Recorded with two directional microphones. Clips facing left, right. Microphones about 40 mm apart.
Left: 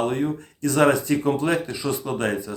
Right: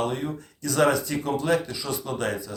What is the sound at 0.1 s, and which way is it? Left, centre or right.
Speech, left.